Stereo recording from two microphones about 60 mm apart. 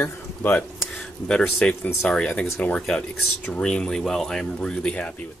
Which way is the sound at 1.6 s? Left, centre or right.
Centre.